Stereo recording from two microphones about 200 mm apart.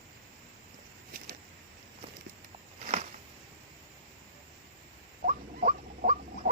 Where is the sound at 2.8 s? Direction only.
35° right (ahead or behind).